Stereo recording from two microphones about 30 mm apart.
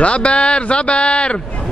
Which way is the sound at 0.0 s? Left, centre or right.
Left.